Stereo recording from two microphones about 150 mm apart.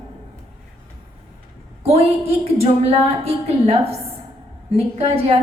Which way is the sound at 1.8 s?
40° right (ahead or behind).